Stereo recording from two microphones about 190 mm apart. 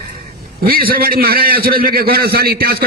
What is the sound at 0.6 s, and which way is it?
A man's voice, 50° right (ahead or behind).